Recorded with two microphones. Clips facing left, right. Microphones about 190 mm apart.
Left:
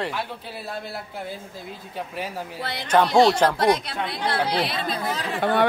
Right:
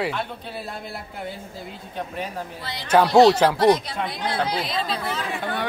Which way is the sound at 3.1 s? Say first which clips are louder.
Right 4 dB; 25° right (ahead or behind).